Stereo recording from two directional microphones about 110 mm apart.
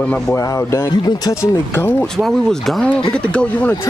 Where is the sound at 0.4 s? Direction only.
30° left (ahead or behind).